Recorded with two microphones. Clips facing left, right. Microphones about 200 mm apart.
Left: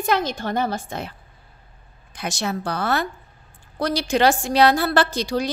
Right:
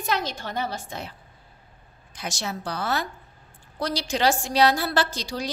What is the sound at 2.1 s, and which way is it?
A woman's voice, 60° left (ahead or behind).